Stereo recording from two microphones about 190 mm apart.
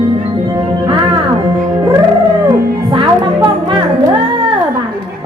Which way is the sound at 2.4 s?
25° right (ahead or behind).